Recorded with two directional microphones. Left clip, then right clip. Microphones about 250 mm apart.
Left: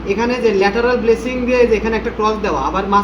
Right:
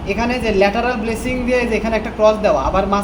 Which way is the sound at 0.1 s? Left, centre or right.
Right.